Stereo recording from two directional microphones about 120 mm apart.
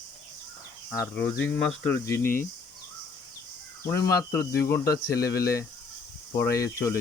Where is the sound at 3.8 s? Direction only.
25° left (ahead or behind).